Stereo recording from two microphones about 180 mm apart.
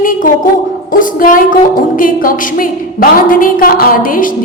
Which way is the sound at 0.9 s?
50° left (ahead or behind).